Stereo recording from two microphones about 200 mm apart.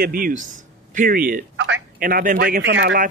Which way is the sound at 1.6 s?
65° right (ahead or behind).